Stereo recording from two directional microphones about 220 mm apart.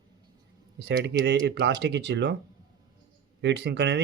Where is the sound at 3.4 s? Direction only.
50° right (ahead or behind).